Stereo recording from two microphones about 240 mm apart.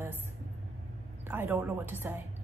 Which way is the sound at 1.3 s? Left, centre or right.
Centre.